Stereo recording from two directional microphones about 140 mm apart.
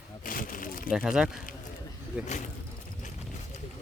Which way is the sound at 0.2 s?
85° left.